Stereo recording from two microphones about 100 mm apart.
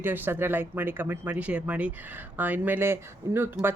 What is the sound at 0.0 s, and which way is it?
Speech, 20° right (ahead or behind).